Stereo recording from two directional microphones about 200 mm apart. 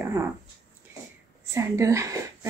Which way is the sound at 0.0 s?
10° right (ahead or behind).